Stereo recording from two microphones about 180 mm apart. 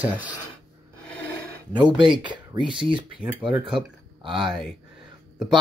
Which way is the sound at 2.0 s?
25° right (ahead or behind).